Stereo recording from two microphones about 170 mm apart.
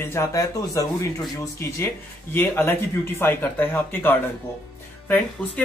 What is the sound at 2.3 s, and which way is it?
Speech, 15° left (ahead or behind).